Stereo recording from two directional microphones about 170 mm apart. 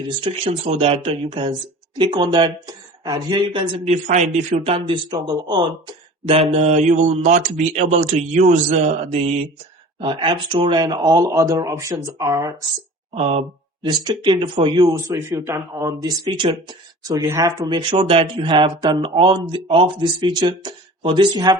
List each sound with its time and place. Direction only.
0.2 s speech: 35° right (ahead or behind)
3.8 s speech: 45° right (ahead or behind); by 12.6 s 20° right (ahead or behind)
13.1 s speech: 40° right (ahead or behind)
13.8 s speech: 30° right (ahead or behind)
17.7 s speech: 30° right (ahead or behind)